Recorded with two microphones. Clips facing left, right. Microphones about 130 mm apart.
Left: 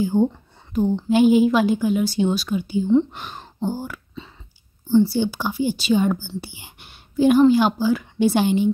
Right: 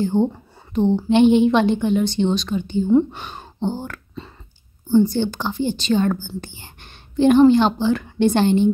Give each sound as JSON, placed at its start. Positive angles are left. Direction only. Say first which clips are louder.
{"t": 0.1, "sound": "speech", "louder": "even", "side_deg": -20}
{"t": 1.0, "sound": "a woman's voice", "louder": "right 1 dB", "side_deg": 5}
{"t": 2.9, "sound": "speech", "louder": "right 2 dB", "side_deg": -10}
{"t": 3.2, "sound": "gasp", "louder": "right 1 dB", "side_deg": 0}
{"t": 3.8, "sound": "speech", "louder": "right 1 dB", "side_deg": 5}